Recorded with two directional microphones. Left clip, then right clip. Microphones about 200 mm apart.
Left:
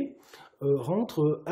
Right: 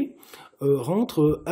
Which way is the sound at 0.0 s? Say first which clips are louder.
Right 5 dB; 30° right (ahead or behind).